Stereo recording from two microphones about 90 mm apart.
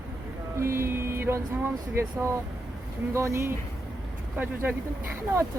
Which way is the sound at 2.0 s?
30° right (ahead or behind).